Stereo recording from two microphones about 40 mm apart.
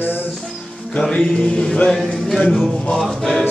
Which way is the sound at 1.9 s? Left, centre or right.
Centre.